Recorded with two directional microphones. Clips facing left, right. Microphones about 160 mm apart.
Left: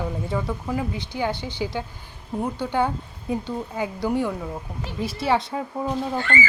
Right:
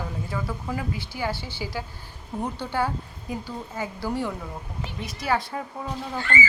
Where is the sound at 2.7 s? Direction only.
20° left (ahead or behind).